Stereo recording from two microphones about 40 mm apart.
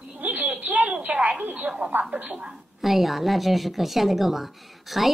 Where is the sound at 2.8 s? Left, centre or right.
Centre.